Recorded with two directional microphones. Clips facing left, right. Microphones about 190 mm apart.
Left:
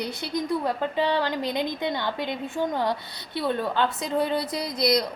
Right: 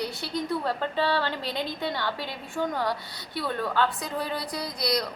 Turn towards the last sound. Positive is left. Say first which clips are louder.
# left 5 dB
turn(degrees=25)  # may be behind; listen again after turning